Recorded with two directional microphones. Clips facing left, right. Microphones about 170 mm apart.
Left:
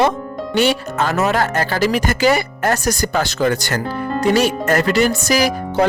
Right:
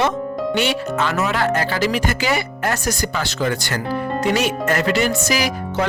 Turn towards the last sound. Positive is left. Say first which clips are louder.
# left 5 dB
turn(degrees=40)  # may be behind; listen again after turning